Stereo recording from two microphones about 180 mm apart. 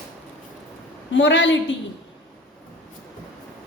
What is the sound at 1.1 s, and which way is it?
Speech, 80° left.